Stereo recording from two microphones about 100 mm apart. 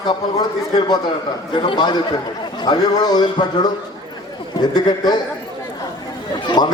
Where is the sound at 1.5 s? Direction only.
50° left (ahead or behind).